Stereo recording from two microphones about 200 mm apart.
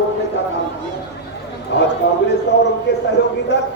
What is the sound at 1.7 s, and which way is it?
Speech, 60° left (ahead or behind).